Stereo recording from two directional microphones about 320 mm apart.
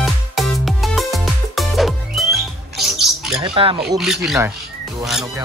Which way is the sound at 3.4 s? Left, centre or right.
Centre.